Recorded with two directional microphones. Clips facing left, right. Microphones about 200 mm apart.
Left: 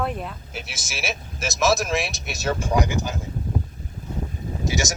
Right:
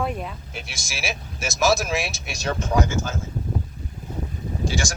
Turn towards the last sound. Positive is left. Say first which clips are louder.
# left 1 dB
turn(degrees=20)  # may be behind; listen again after turning